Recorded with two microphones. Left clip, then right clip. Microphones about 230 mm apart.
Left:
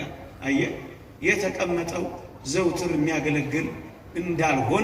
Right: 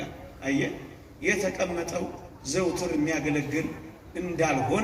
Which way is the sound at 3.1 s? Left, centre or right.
Left.